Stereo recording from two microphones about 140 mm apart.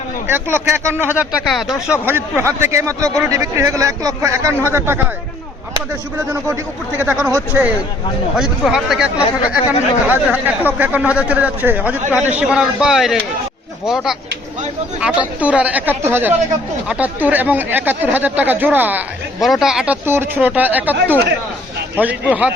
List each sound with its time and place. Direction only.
0.3 s a man's voice: 15° right (ahead or behind)
2.0 s a man's voice: 15° right (ahead or behind)
6.5 s a man's voice: 15° right (ahead or behind)
8.4 s a man's voice: 5° right (ahead or behind)
19.4 s a man's voice: centre (ahead or behind)